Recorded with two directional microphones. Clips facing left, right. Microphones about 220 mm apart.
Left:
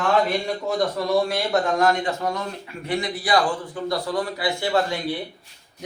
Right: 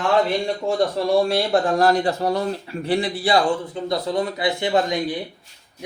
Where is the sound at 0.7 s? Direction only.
30° right (ahead or behind).